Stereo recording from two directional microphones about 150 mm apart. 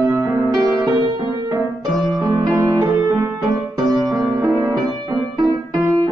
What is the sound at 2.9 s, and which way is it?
Music, 10° right (ahead or behind).